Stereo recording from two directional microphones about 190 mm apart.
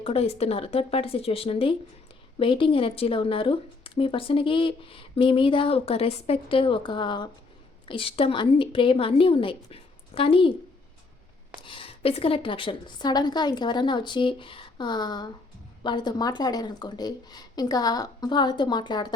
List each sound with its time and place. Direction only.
0.0 s speech: 30° left (ahead or behind)
11.6 s speech: 25° left (ahead or behind)